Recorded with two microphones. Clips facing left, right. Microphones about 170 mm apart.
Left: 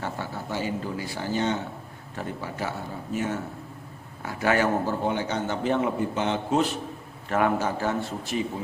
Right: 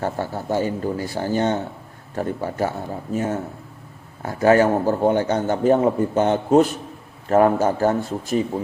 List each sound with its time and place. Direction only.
0.0 s a man's voice: 45° right (ahead or behind)